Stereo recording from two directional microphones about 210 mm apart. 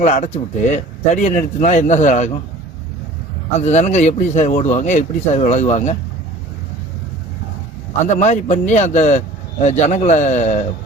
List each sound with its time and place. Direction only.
0.0 s speech: 35° left (ahead or behind)
3.6 s speech: 30° left (ahead or behind)
8.1 s speech: 35° left (ahead or behind)